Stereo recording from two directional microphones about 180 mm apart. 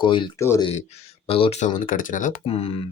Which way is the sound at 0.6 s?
35° left (ahead or behind).